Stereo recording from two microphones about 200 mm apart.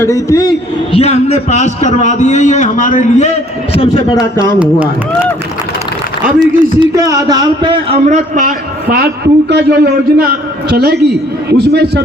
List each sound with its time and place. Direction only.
0.0 s a man's voice: 15° left (ahead or behind)
0.9 s a man's voice: 30° left (ahead or behind)
3.8 s a man's voice: 25° left (ahead or behind)
4.6 s speech: 10° right (ahead or behind)
6.4 s a man's voice: 20° right (ahead or behind); by 12.0 s 55° right (ahead or behind)